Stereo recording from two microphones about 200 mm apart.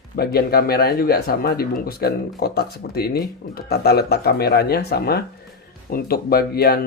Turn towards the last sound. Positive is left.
turn(degrees=50)  # may be behind; listen again after turning